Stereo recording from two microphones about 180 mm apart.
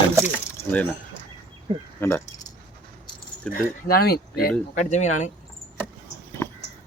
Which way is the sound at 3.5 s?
55° left (ahead or behind).